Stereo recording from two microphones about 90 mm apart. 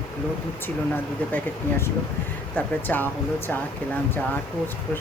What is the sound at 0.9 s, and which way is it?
Speech, 20° left (ahead or behind).